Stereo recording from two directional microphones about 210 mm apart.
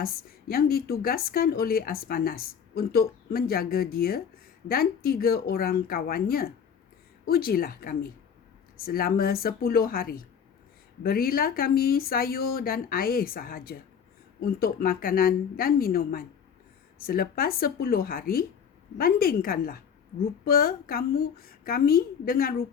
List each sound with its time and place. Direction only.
0.0 s speech: 45° left (ahead or behind)